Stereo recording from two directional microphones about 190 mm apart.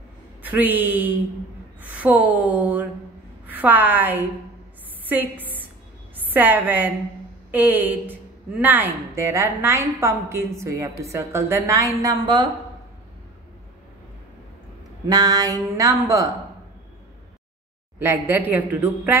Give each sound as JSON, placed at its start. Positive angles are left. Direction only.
{"t": 0.4, "sound": "a woman's voice", "side_deg": -10}
{"t": 15.0, "sound": "a woman's voice", "side_deg": -20}
{"t": 17.9, "sound": "a woman's voice", "side_deg": -10}